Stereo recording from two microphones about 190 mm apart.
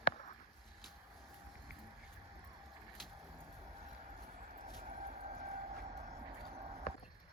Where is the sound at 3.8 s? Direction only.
35° right (ahead or behind).